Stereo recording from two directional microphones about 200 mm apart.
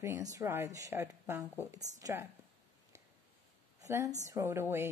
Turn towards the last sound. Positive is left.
turn(degrees=-10)  # may be behind; listen again after turning